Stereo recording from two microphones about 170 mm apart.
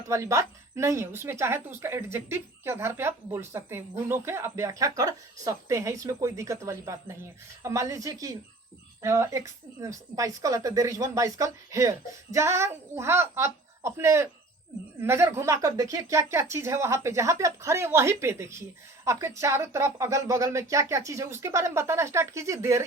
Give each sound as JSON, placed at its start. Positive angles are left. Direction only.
{"t": 0.1, "sound": "speech", "side_deg": -20}